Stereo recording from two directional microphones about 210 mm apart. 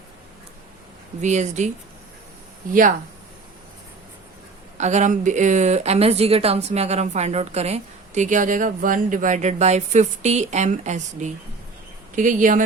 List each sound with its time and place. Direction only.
1.2 s speech: 35° right (ahead or behind)
4.8 s speech: 35° right (ahead or behind)